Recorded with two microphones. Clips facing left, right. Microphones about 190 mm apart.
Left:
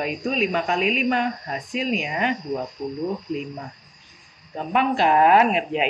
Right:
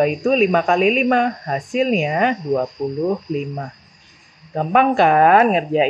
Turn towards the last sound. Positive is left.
turn(degrees=-40)  # may be behind; listen again after turning